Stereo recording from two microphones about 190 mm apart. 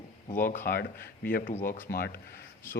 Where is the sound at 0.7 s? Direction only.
55° left (ahead or behind).